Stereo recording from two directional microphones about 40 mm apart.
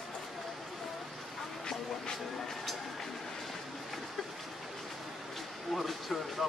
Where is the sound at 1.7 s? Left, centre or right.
Centre.